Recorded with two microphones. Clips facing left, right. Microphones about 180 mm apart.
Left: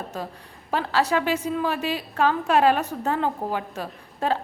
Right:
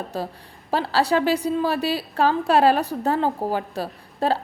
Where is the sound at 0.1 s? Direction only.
35° right (ahead or behind).